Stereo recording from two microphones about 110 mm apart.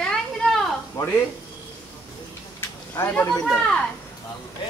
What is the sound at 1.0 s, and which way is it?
Speech, 30° left (ahead or behind).